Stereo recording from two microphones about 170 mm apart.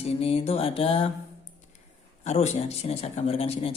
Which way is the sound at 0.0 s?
35° left (ahead or behind).